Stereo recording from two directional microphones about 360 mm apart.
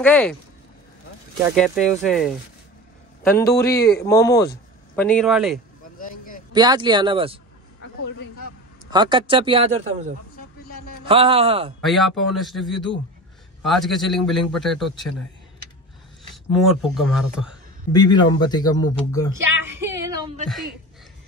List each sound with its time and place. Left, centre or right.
0.0 s a man's voice: centre
1.5 s a man's voice: centre
5.9 s a sound: left
6.5 s speech: centre
8.9 s speech: centre
11.1 s speech: centre
11.8 s a man's voice: centre
16.5 s a man's voice: centre
17.9 s speech: centre
19.7 s music: centre